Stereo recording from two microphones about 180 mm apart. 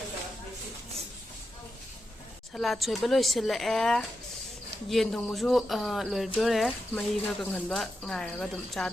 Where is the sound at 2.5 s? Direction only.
Centre (ahead or behind).